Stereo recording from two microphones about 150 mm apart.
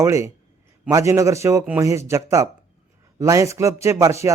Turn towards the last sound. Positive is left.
turn(degrees=-20)  # may be behind; listen again after turning